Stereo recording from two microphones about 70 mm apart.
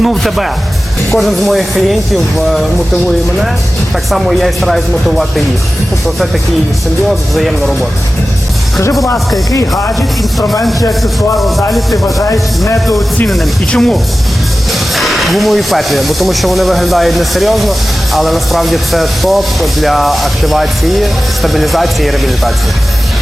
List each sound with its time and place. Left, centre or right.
0.0 s speech: centre
4.1 s speech: centre
7.1 s speech: centre
8.8 s speech: left
11.0 s speech: centre
12.0 s speech: left
13.2 s speech: centre
13.7 s speech: centre
14.7 s speech: centre